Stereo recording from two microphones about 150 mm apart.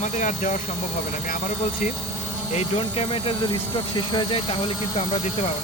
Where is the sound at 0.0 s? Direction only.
50° left (ahead or behind).